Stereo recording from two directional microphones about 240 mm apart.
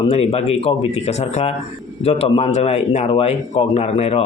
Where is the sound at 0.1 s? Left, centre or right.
Left.